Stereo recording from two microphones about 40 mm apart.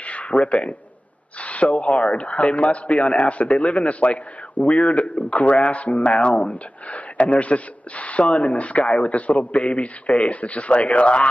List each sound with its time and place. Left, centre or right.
0.0 s speech: left